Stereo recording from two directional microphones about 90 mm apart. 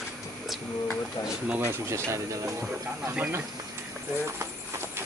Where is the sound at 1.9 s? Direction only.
35° right (ahead or behind).